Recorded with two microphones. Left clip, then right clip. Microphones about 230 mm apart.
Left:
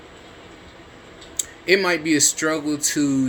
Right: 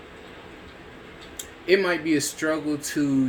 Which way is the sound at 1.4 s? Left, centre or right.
Left.